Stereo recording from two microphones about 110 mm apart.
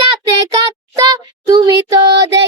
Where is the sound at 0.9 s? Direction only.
30° right (ahead or behind).